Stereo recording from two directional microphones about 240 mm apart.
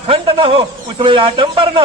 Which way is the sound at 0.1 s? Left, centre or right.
Right.